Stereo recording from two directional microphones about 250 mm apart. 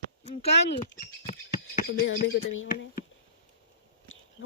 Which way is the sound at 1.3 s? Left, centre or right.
Left.